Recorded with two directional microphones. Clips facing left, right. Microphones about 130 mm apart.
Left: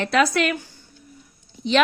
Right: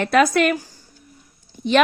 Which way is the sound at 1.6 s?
50° right (ahead or behind).